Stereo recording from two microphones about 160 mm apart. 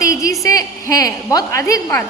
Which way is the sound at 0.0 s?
20° left (ahead or behind).